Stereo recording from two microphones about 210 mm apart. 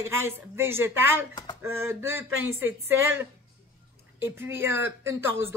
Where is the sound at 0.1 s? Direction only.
10° right (ahead or behind).